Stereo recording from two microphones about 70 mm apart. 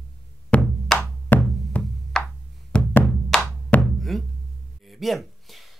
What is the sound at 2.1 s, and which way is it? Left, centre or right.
Music, centre.